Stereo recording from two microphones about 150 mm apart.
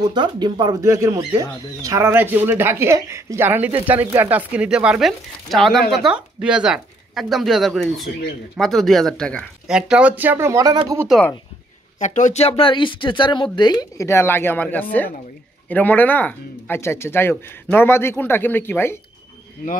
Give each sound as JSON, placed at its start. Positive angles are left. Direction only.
{"t": 0.0, "sound": "speech", "side_deg": -30}
{"t": 9.7, "sound": "speech", "side_deg": -5}
{"t": 12.0, "sound": "speech", "side_deg": 55}